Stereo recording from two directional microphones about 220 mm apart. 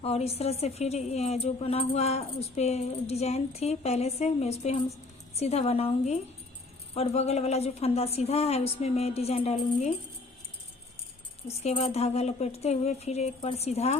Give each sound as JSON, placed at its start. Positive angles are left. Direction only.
{"t": 0.0, "sound": "speech", "side_deg": 30}
{"t": 11.6, "sound": "speech", "side_deg": 25}